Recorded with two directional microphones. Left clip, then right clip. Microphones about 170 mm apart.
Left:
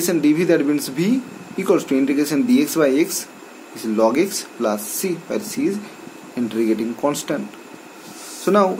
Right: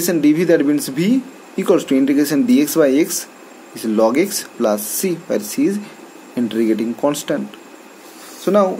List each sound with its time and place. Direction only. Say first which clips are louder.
0.0 s speech: right 2 dB; 20° right (ahead or behind)
8.5 s speech: right 2 dB; 10° right (ahead or behind)